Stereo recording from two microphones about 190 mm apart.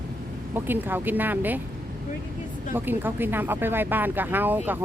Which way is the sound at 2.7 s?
10° right (ahead or behind).